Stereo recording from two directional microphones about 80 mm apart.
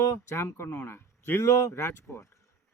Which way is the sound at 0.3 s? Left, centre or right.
Left.